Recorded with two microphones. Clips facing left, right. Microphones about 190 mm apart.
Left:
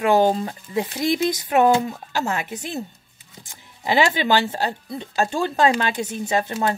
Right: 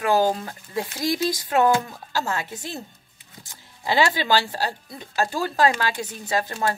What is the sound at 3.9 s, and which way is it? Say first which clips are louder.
Speech: left 2 dB; 20° left (ahead or behind).